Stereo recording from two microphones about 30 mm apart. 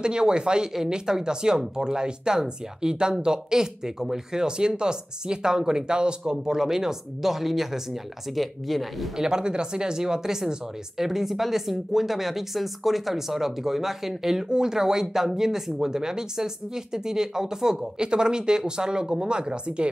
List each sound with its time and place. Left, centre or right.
0.0 s speech: right
6.3 s speech: centre
8.3 s speech: centre
9.1 s speech: right
11.0 s speech: centre; by 19.9 s right